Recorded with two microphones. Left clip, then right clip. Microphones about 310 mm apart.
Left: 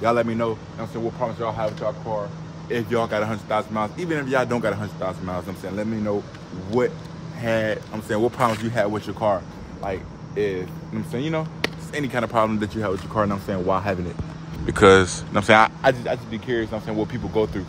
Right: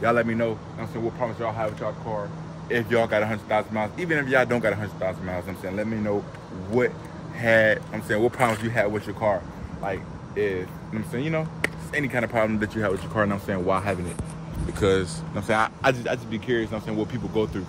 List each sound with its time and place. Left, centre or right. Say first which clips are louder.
0.0 s speech: left 1 dB; centre
2.7 s speech: right 1 dB; centre
7.4 s speech: right 4 dB; centre
14.8 s speech: left 9 dB; left
15.8 s speech: left 3 dB; centre